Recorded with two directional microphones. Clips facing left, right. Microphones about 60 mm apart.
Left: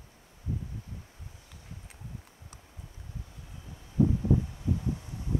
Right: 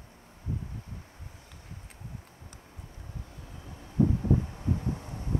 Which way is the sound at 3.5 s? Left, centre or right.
Right.